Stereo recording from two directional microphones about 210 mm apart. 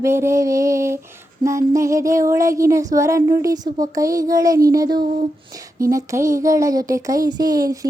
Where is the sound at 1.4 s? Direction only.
15° right (ahead or behind).